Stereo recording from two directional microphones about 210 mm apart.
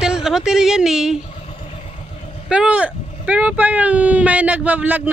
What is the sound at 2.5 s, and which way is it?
Speech, 5° right (ahead or behind).